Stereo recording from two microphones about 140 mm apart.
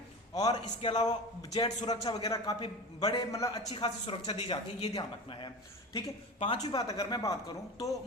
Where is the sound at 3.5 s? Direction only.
35° left (ahead or behind).